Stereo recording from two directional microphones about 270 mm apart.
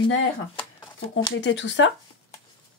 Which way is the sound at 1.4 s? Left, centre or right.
Left.